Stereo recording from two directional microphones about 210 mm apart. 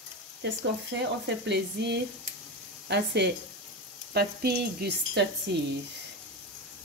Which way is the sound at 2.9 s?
55° right (ahead or behind).